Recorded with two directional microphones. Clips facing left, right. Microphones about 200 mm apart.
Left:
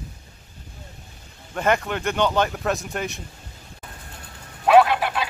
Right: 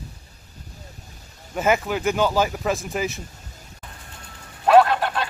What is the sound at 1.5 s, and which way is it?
Speech, 5° right (ahead or behind).